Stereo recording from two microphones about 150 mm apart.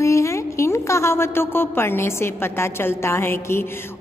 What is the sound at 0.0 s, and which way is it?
A woman's voice, 20° left (ahead or behind).